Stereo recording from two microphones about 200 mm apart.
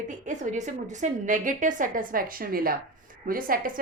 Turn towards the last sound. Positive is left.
turn(degrees=-45)  # may be behind; listen again after turning